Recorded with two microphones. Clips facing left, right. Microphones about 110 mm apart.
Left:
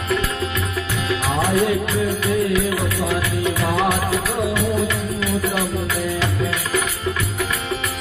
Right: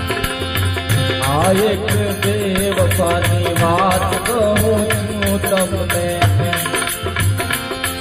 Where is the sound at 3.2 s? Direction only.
90° right.